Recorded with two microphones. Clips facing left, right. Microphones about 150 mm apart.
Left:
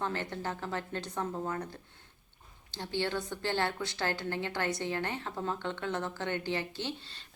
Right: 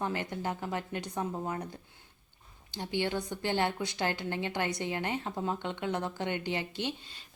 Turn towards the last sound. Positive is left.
turn(degrees=-15)  # may be behind; listen again after turning